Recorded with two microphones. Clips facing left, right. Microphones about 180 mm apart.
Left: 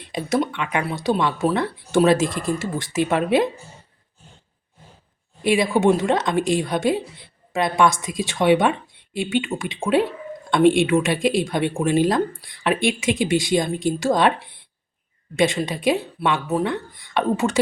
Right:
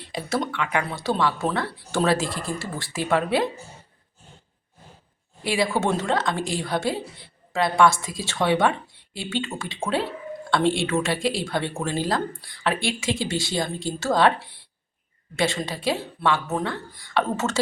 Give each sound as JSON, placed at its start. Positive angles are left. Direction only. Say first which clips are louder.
{"t": 0.0, "sound": "speech", "louder": "left 5 dB", "side_deg": 15}
{"t": 5.4, "sound": "speech", "louder": "left 5 dB", "side_deg": 20}
{"t": 15.4, "sound": "speech", "louder": "left 5 dB", "side_deg": 15}